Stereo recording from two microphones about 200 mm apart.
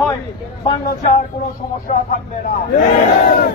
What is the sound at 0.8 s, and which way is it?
Speech, 40° left (ahead or behind).